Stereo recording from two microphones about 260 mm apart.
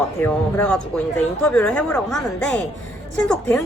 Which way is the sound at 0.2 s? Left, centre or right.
Centre.